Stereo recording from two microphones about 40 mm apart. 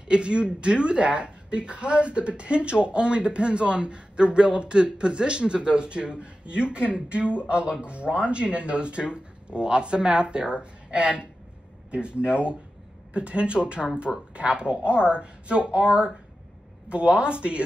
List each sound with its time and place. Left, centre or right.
0.1 s a woman's voice: right